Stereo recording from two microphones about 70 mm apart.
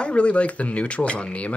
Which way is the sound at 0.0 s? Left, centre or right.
Centre.